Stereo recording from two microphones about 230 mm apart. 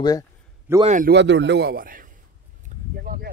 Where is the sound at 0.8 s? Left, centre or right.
Right.